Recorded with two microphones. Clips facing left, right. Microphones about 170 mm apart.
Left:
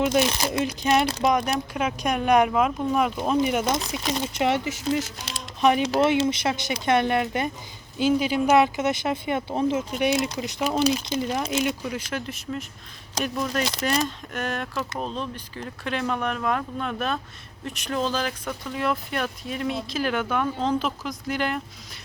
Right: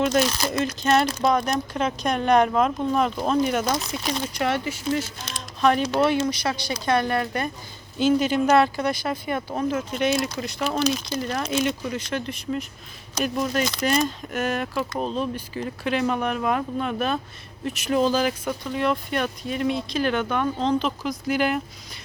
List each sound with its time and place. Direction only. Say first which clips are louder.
0.0 s speech: even; 15° left (ahead or behind)
7.9 s speech: right 2 dB; 10° left (ahead or behind); by 9.8 s 25° left (ahead or behind)
9.9 s speech: even; 15° left (ahead or behind)
13.2 s speech: right 3 dB; 10° right (ahead or behind)
13.5 s speech: right 2 dB; centre (ahead or behind)
18.6 s speech: right 2 dB; centre (ahead or behind)